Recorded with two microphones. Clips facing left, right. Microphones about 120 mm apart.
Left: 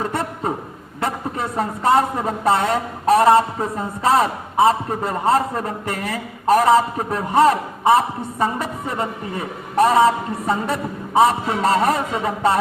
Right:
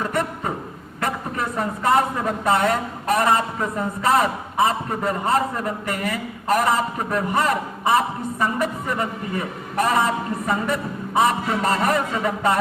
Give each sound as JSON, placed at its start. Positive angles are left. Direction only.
{"t": 0.1, "sound": "a sound", "side_deg": 30}
{"t": 1.0, "sound": "a woman's voice", "side_deg": 30}
{"t": 9.7, "sound": "a woman's voice", "side_deg": 30}